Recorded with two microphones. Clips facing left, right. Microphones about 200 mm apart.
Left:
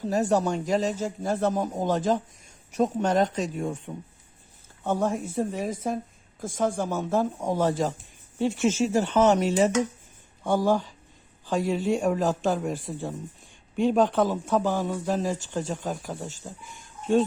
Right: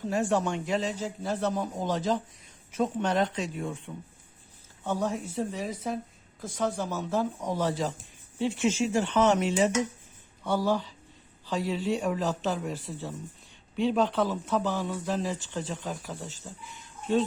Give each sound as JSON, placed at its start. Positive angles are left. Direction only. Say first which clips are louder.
{"t": 0.0, "sound": "speech", "louder": "left 3 dB", "side_deg": 40}